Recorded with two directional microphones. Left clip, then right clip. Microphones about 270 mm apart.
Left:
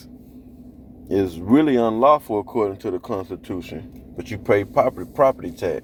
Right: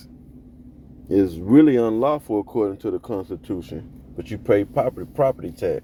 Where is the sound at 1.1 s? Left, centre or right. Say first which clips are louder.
Right 2 dB; right.